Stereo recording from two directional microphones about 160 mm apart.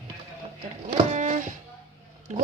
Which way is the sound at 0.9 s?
45° right (ahead or behind).